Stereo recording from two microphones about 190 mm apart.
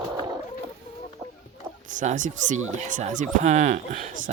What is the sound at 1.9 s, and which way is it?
Speech, 45° right (ahead or behind).